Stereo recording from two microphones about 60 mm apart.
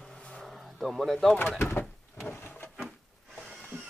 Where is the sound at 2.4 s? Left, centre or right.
Left.